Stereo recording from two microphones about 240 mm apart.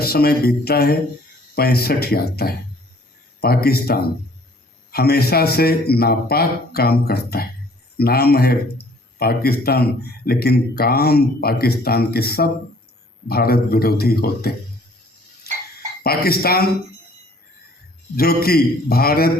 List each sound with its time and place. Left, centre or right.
0.0 s speech: left
15.5 s frog: left
16.0 s speech: left
18.2 s speech: left